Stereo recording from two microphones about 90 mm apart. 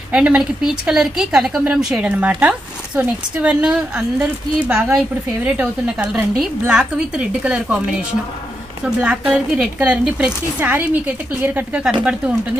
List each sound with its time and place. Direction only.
0.1 s a woman's voice: 10° right (ahead or behind)
9.3 s a woman's voice: 15° right (ahead or behind)